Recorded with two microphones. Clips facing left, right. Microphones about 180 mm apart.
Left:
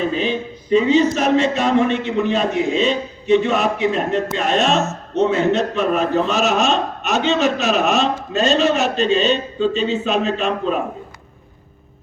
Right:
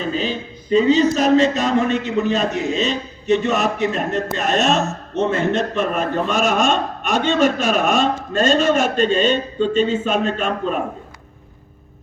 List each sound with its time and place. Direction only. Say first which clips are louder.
0.2 s a man's voice: left 3 dB; 35° right (ahead or behind)